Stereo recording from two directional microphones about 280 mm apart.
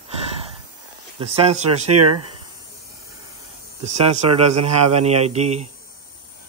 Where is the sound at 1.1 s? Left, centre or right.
Centre.